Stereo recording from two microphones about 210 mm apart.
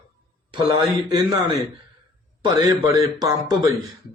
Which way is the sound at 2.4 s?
15° right (ahead or behind).